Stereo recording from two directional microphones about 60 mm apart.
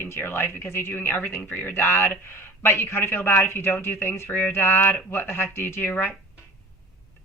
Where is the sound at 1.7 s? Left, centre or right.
Left.